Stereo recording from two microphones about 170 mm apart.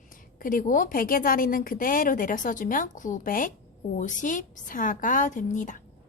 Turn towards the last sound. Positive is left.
turn(degrees=50)  # may be behind; listen again after turning